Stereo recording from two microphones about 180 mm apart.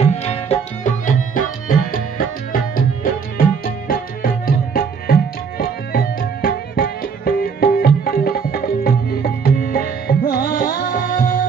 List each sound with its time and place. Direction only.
0.0 s tabla: 35° left (ahead or behind); by 2.2 s 50° left (ahead or behind)
2.7 s music: 50° left (ahead or behind)